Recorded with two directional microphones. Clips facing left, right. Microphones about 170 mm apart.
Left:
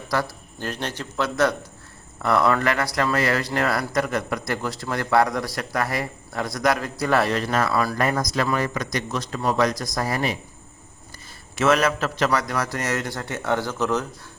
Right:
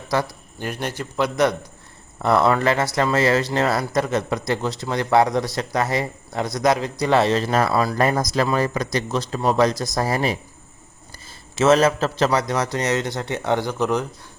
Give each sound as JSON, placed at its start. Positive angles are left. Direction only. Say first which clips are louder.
{"t": 0.1, "sound": "a sound", "louder": "right 3 dB", "side_deg": -20}
{"t": 0.7, "sound": "a man's voice", "louder": "right 3 dB", "side_deg": -10}
{"t": 11.5, "sound": "speech", "louder": "right 4 dB", "side_deg": -25}